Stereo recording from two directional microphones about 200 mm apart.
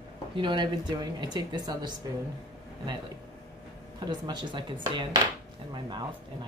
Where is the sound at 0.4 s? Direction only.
25° right (ahead or behind).